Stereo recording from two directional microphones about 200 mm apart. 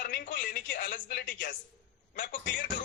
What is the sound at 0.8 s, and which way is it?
A man's voice, 40° left (ahead or behind).